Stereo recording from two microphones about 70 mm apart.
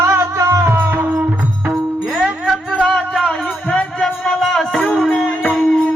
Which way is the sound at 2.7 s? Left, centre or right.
Centre.